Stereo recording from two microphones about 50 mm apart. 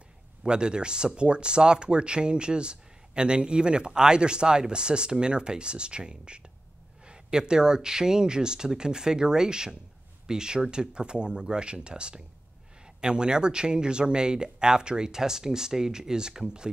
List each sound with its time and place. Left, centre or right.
0.4 s speech: centre